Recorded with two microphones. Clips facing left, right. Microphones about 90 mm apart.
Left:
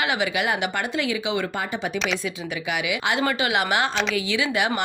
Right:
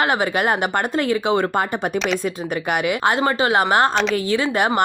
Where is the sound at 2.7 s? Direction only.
45° right (ahead or behind).